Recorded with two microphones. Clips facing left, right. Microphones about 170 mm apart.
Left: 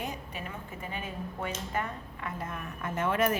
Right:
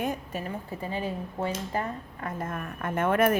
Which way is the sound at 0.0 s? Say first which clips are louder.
Right 7 dB; 50° right (ahead or behind).